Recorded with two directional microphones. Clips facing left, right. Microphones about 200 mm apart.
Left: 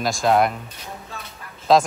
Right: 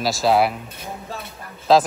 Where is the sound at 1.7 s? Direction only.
Centre (ahead or behind).